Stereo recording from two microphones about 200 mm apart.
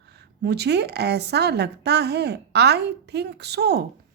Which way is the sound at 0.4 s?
55° right (ahead or behind).